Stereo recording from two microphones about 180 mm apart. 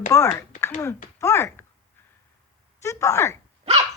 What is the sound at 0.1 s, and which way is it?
Speech, 15° left (ahead or behind).